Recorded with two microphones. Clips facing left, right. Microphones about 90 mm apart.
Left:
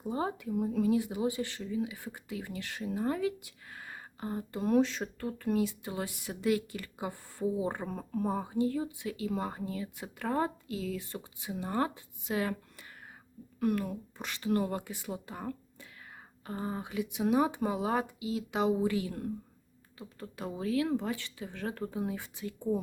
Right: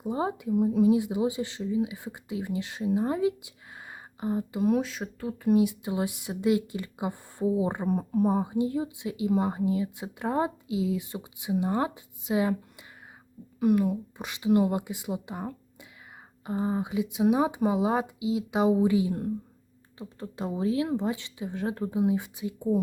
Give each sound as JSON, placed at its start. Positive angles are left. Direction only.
{"t": 0.0, "sound": "speech", "side_deg": -20}